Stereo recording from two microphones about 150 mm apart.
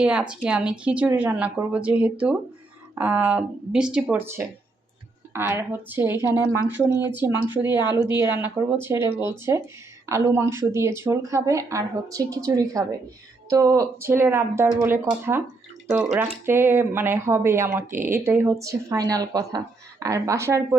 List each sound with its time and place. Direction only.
0.0 s a woman's voice: 5° right (ahead or behind)